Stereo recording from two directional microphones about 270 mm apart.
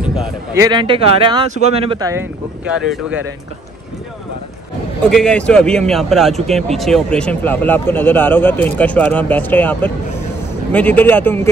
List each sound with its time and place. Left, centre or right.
0.0 s a sound: centre
0.7 s speech: centre
5.0 s speech: centre